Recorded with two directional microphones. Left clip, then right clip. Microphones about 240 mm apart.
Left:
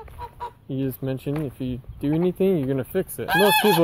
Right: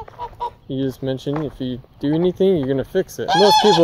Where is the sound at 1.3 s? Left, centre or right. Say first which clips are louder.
Right 5 dB; left.